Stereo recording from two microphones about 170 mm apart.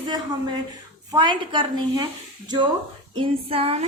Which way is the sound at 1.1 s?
25° right (ahead or behind).